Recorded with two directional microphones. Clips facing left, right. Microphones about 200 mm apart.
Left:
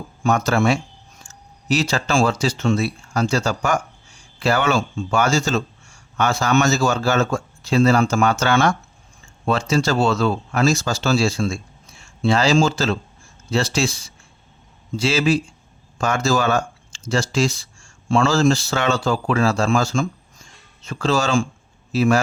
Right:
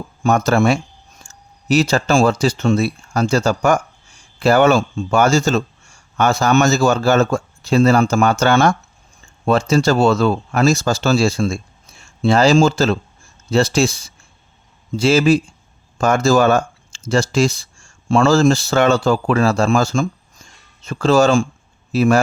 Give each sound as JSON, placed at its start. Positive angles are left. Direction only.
{"t": 0.2, "sound": "speech", "side_deg": -45}